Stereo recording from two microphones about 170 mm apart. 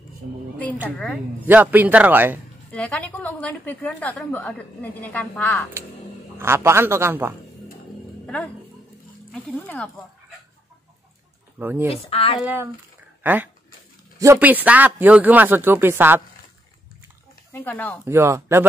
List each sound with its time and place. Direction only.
0.8 s speech: 5° left (ahead or behind)
1.4 s a man's voice: 10° right (ahead or behind)
2.7 s a woman's voice: 5° left (ahead or behind)
6.3 s a man's voice: 15° right (ahead or behind)
9.3 s a woman's voice: 10° left (ahead or behind)
11.5 s speech: 10° right (ahead or behind)
11.9 s speech: 35° left (ahead or behind)
12.4 s a man's voice: 10° right (ahead or behind)
17.5 s a woman's voice: 15° left (ahead or behind)
18.0 s a man's voice: 15° right (ahead or behind)